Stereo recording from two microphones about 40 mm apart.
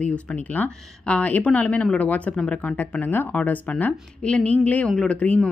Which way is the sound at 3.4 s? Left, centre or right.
Left.